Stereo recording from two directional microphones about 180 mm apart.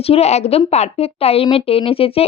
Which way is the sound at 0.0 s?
35° left (ahead or behind).